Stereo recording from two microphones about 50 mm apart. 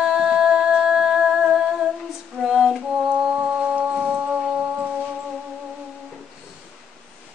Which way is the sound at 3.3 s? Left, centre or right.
Centre.